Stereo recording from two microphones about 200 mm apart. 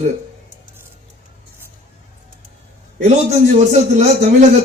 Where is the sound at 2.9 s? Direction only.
35° right (ahead or behind).